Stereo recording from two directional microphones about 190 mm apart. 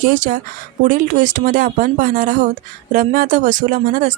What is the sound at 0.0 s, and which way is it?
Speech, 45° right (ahead or behind).